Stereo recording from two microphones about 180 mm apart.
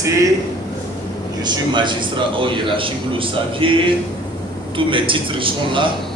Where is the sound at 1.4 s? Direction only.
25° right (ahead or behind).